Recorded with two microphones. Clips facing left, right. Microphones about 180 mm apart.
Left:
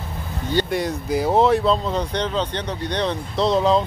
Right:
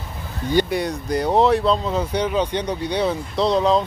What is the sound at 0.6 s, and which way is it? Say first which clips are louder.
Speech: even; centre (ahead or behind).